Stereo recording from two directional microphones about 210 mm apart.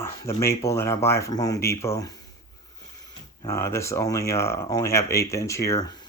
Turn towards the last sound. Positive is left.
turn(degrees=15)  # may be behind; listen again after turning